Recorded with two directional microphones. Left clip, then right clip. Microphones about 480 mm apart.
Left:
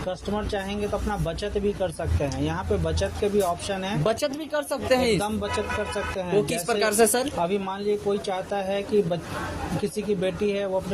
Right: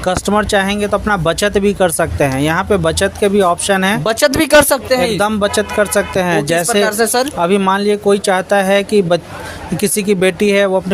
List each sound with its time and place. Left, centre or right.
0.1 s speech: centre
4.9 s speech: left
5.1 s speech: centre
6.8 s speech: left
7.4 s speech: centre